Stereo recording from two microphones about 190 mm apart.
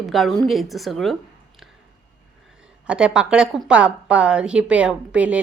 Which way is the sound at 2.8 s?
5° right (ahead or behind).